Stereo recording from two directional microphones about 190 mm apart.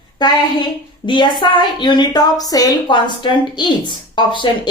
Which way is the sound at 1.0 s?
25° left (ahead or behind).